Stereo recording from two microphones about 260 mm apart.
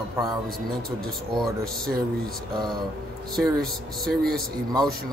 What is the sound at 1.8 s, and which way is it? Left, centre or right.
Speech, centre.